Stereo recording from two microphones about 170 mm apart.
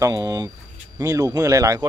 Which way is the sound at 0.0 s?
20° right (ahead or behind).